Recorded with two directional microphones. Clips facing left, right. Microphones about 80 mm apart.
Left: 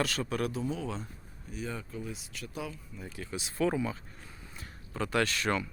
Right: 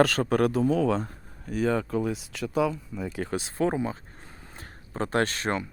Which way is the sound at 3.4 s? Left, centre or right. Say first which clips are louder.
Right 2 dB; right.